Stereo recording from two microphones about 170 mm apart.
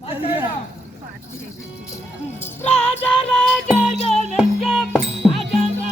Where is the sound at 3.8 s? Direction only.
40° left (ahead or behind).